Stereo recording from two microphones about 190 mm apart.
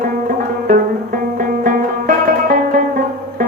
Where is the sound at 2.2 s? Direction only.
50° right (ahead or behind).